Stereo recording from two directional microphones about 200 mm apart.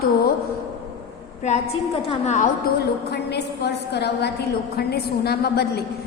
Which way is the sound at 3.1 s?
55° left (ahead or behind).